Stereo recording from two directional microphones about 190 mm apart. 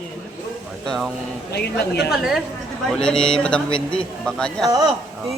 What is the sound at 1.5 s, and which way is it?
Speech, 55° left (ahead or behind).